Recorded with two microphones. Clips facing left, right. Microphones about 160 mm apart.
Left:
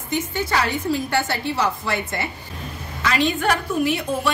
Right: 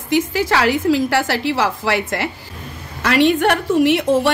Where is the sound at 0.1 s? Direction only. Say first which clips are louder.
Right 6 dB; 90° right.